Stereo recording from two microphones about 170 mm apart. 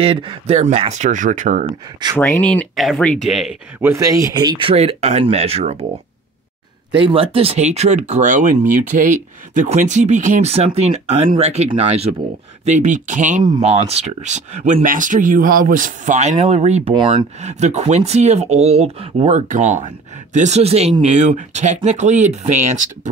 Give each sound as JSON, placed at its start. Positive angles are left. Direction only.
{"t": 0.0, "sound": "speech", "side_deg": -30}
{"t": 0.6, "sound": "speech", "side_deg": -40}
{"t": 2.1, "sound": "speech", "side_deg": 15}
{"t": 3.8, "sound": "speech", "side_deg": -20}
{"t": 7.1, "sound": "speech", "side_deg": -35}
{"t": 16.9, "sound": "speech", "side_deg": -30}
{"t": 17.4, "sound": "speech", "side_deg": -40}